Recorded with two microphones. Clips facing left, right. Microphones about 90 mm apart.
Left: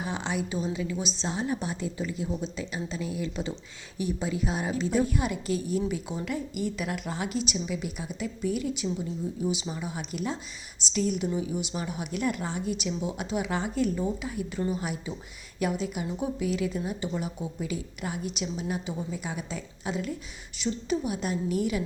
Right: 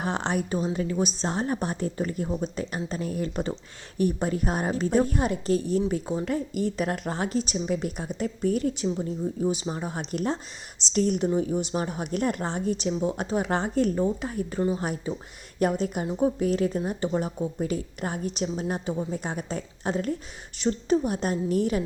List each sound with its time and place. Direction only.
0.0 s a woman's voice: 55° right (ahead or behind)